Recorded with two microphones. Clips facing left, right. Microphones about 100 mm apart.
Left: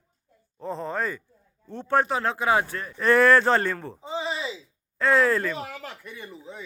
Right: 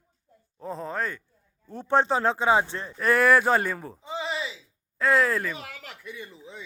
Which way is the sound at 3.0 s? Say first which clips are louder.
Left 2 dB; 5° right (ahead or behind).